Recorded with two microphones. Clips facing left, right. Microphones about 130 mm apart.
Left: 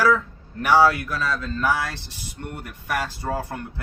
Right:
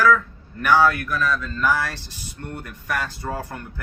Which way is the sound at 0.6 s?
30° left (ahead or behind).